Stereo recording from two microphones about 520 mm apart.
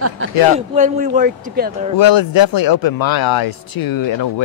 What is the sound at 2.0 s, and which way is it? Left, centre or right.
Speech, left.